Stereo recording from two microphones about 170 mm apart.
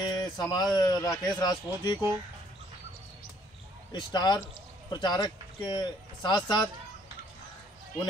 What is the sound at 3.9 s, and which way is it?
Speech, 25° left (ahead or behind).